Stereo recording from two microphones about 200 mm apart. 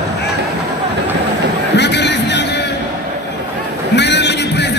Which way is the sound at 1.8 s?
60° left (ahead or behind).